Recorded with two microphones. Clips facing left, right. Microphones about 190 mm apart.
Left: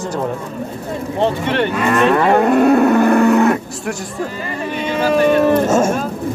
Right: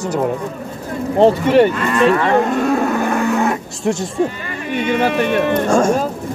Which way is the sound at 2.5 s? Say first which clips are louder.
Left 5 dB; 65° left (ahead or behind).